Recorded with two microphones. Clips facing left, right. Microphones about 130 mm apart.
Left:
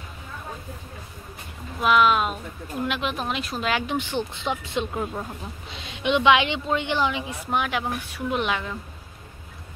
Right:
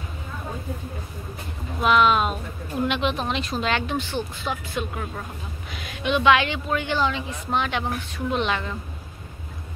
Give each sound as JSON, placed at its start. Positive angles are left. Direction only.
{"t": 1.8, "sound": "speech", "side_deg": 5}
{"t": 3.8, "sound": "a woman's voice", "side_deg": 15}